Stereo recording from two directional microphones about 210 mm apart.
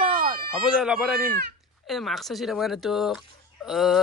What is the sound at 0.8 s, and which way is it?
Speech, 5° right (ahead or behind).